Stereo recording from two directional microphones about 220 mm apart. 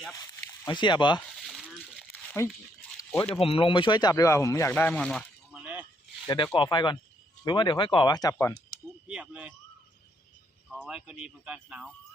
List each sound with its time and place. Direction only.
0.2 s speech: 20° left (ahead or behind)
1.5 s coin: centre (ahead or behind)
3.0 s a sound: 10° left (ahead or behind)
3.3 s speech: 25° left (ahead or behind); by 5.8 s 5° right (ahead or behind)
6.2 s speech: 20° left (ahead or behind)
9.0 s speech: 5° right (ahead or behind)
10.7 s speech: centre (ahead or behind)